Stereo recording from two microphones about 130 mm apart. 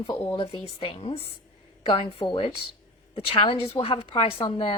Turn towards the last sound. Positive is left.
turn(degrees=45)  # may be behind; listen again after turning